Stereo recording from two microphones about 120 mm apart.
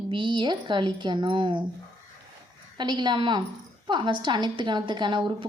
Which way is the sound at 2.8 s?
35° right (ahead or behind).